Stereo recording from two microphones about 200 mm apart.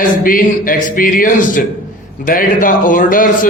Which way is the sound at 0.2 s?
45° left (ahead or behind).